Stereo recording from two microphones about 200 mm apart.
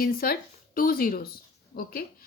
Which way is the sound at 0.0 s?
45° left (ahead or behind).